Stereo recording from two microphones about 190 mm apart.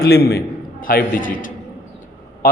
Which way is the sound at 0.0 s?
55° left (ahead or behind).